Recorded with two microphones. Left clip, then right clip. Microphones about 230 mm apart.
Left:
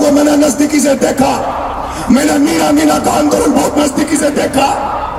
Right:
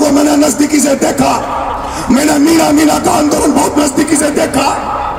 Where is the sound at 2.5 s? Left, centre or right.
Right.